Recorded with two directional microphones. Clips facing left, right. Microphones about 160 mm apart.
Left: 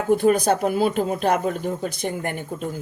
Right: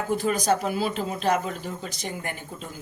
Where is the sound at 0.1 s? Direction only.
55° left (ahead or behind).